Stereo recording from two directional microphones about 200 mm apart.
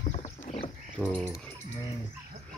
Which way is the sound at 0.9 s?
5° left (ahead or behind).